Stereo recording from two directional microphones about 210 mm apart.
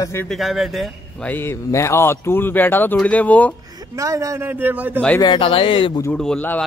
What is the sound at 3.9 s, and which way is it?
Speech, 15° right (ahead or behind).